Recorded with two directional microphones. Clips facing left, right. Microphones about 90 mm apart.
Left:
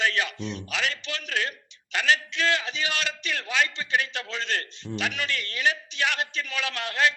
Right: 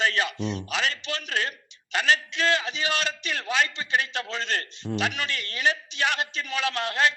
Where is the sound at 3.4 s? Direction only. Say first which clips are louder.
Right 1 dB; 35° right (ahead or behind).